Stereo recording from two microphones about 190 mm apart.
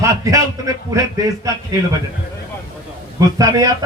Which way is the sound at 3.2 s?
15° right (ahead or behind).